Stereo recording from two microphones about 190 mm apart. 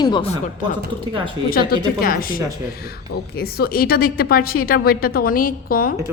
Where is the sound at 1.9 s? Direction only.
50° left (ahead or behind).